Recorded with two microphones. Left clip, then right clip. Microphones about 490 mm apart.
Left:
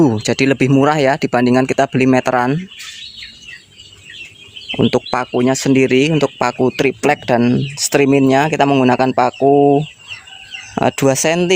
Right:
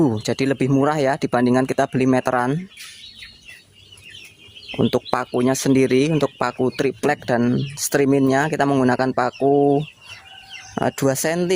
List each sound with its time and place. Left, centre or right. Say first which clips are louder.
0.0 s speech: left 6 dB; right
4.7 s speech: left 5 dB; right